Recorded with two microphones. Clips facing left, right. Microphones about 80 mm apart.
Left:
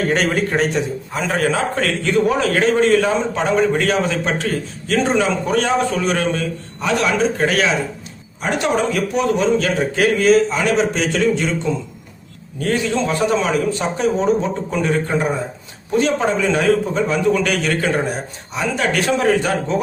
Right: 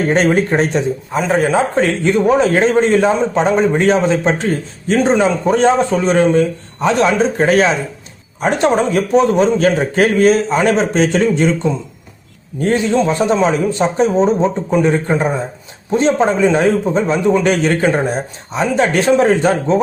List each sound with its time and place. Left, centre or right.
0.1 s a man's voice: right
12.5 s a man's voice: right